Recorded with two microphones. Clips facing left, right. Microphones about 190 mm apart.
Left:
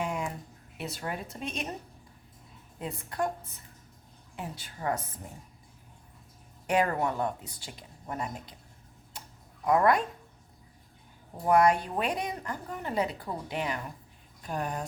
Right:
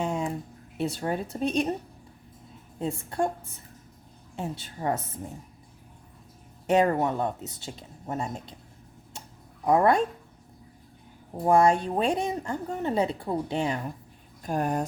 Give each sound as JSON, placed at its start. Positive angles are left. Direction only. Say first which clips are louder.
{"t": 0.0, "sound": "a sound", "louder": "right 4 dB", "side_deg": -25}
{"t": 0.8, "sound": "speech", "louder": "right 8 dB", "side_deg": -30}
{"t": 2.7, "sound": "a woman's voice", "louder": "right 5 dB", "side_deg": -25}
{"t": 4.4, "sound": "a woman's voice", "louder": "right 5 dB", "side_deg": -25}
{"t": 6.7, "sound": "a woman's voice", "louder": "right 5 dB", "side_deg": -25}
{"t": 9.6, "sound": "a woman's voice", "louder": "right 3 dB", "side_deg": -25}
{"t": 11.4, "sound": "a woman's voice", "louder": "right 3 dB", "side_deg": -25}
{"t": 14.4, "sound": "speech", "louder": "right 6 dB", "side_deg": -45}